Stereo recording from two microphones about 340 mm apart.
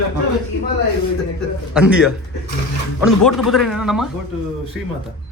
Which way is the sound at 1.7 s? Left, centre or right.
Centre.